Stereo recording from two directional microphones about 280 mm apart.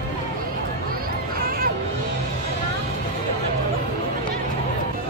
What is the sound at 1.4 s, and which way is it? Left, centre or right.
Music, right.